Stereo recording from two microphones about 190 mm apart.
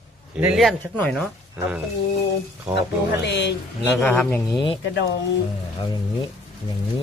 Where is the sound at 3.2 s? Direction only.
65° left (ahead or behind).